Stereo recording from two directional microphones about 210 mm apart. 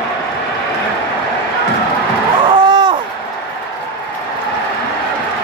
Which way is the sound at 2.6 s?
20° right (ahead or behind).